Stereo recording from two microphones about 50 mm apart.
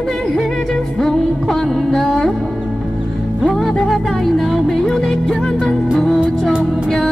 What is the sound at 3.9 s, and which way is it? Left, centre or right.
Music, centre.